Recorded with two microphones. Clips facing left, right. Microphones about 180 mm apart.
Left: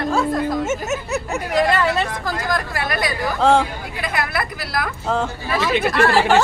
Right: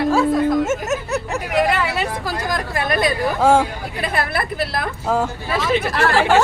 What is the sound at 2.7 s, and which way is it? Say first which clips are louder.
A woman's voice: right 4 dB; 25° right (ahead or behind).